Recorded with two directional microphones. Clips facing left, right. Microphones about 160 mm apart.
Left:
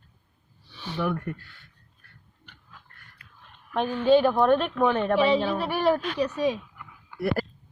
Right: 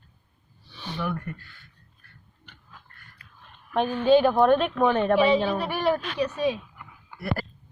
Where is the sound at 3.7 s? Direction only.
15° right (ahead or behind).